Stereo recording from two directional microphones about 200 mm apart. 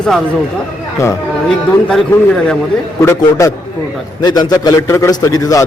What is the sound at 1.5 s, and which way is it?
A man's voice, centre (ahead or behind).